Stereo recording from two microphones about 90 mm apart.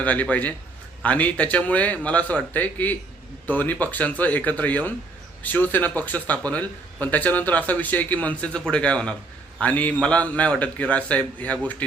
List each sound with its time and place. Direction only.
0.0 s speech: 15° left (ahead or behind)